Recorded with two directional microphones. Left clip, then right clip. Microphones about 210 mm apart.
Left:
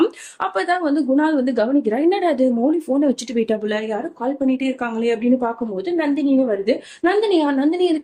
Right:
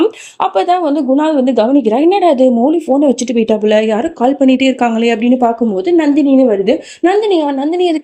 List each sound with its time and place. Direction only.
0.5 s a woman's voice: 30° right (ahead or behind)
6.0 s a woman's voice: 30° right (ahead or behind)